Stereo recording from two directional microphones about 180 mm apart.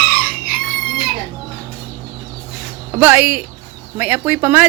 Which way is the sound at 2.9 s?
10° right (ahead or behind).